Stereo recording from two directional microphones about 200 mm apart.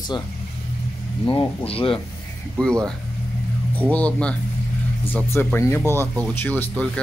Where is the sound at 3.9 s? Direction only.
5° left (ahead or behind).